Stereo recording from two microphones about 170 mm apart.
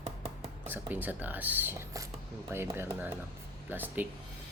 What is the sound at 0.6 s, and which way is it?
Speech, 10° right (ahead or behind).